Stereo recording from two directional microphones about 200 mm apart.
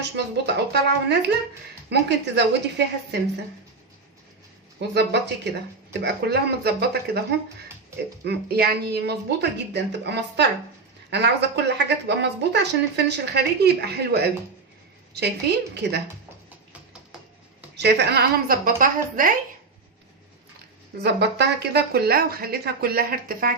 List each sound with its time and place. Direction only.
0.0 s speech: 55° right (ahead or behind)
4.8 s speech: 55° right (ahead or behind)
8.2 s speech: 55° right (ahead or behind)
17.7 s speech: 55° right (ahead or behind)
21.0 s speech: 55° right (ahead or behind)